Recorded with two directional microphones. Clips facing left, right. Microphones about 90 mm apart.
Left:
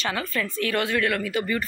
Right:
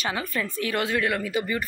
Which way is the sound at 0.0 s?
15° right (ahead or behind).